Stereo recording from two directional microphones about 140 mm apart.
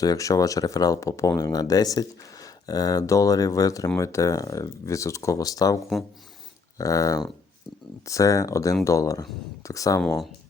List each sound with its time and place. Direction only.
0.0 s speech: 25° left (ahead or behind)